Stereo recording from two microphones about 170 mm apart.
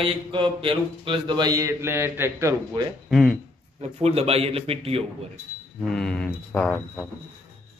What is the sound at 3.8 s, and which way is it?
Speech, 35° right (ahead or behind).